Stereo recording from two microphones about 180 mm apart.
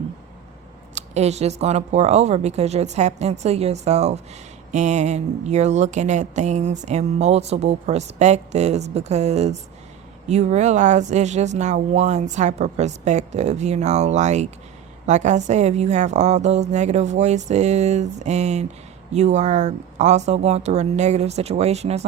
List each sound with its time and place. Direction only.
0.9 s speech: 35° right (ahead or behind)